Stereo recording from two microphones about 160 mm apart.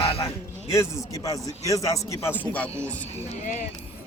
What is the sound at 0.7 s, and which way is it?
A man's voice, 20° left (ahead or behind).